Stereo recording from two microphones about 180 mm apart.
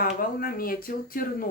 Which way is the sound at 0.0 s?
50° left (ahead or behind).